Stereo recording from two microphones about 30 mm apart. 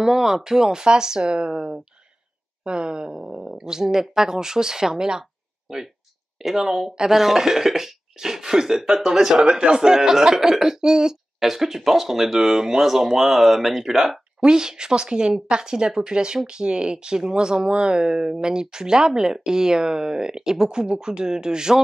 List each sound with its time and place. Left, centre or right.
0.0 s speech: centre
3.3 s speech: centre
6.4 s speech: centre
9.4 s a man's voice: right
9.8 s speech: centre
11.3 s speech: centre
14.4 s speech: right